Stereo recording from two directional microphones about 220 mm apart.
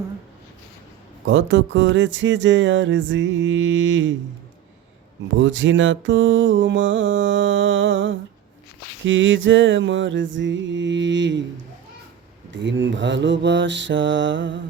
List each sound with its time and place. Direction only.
1.3 s music: 55° right (ahead or behind)
5.4 s music: 60° right (ahead or behind)
12.5 s music: 55° right (ahead or behind)